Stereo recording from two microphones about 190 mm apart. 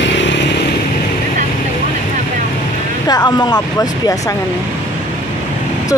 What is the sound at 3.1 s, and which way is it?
Speech, 20° left (ahead or behind).